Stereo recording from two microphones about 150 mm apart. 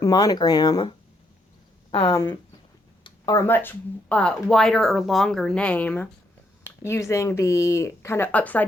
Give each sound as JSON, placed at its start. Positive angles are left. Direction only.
{"t": 0.0, "sound": "speech", "side_deg": 25}
{"t": 2.0, "sound": "speech", "side_deg": 20}
{"t": 3.0, "sound": "a sound", "side_deg": 30}
{"t": 3.4, "sound": "speech", "side_deg": 15}